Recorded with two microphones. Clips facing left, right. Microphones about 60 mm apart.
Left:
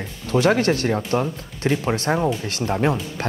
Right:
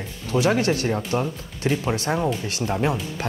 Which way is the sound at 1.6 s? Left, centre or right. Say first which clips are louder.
Left 2 dB; left.